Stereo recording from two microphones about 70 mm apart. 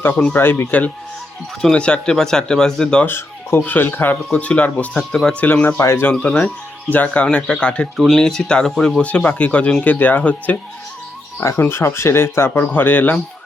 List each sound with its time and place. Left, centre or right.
0.0 s speech: left
1.7 s speech: centre
3.1 s speech: left
3.6 s speech: left
4.3 s speech: centre
4.9 s speech: centre
5.4 s speech: left
5.8 s speech: left
6.1 s speech: left
11.7 s speech: left